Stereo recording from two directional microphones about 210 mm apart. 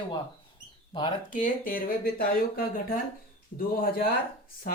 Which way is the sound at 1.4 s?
45° left (ahead or behind).